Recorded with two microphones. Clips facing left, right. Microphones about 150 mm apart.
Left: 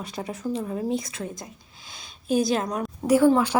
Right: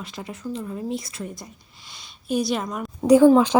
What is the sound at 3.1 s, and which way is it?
Speech, 15° right (ahead or behind).